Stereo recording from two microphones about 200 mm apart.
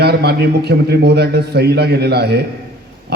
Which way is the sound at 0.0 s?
55° right (ahead or behind).